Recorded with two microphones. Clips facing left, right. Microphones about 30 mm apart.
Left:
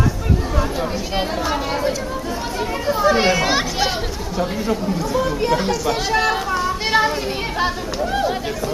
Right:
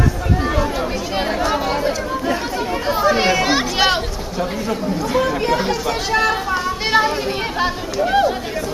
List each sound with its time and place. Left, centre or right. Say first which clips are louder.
1.1 s speech: right 3 dB; centre
3.0 s speech: even; centre
6.5 s children playing: right 1 dB; centre
8.0 s speech: right 6 dB; right